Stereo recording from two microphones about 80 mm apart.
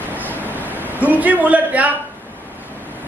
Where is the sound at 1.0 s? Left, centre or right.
Centre.